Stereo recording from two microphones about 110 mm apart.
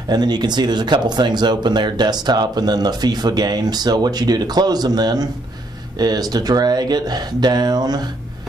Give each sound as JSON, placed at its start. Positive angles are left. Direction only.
{"t": 0.1, "sound": "speech", "side_deg": -40}